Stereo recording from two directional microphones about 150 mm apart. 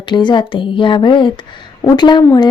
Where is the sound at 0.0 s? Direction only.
30° left (ahead or behind).